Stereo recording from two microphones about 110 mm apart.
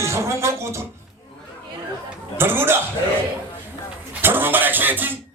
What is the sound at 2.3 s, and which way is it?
Speech, 20° right (ahead or behind).